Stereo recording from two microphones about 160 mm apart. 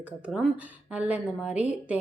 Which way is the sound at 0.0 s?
5° right (ahead or behind).